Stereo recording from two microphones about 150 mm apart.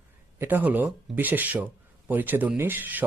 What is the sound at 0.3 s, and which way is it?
Speech, 10° right (ahead or behind).